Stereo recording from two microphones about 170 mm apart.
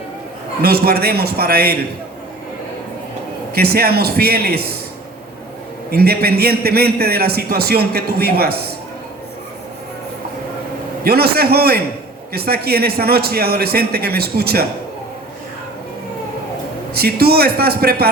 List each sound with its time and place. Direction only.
0.6 s a man's voice: 65° right (ahead or behind)
3.5 s a man's voice: 65° right (ahead or behind)
5.9 s a man's voice: 65° right (ahead or behind)
11.0 s a man's voice: 65° right (ahead or behind)
16.9 s a man's voice: 65° right (ahead or behind)